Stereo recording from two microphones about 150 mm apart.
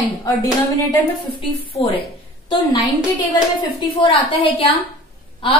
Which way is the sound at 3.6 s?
35° left (ahead or behind).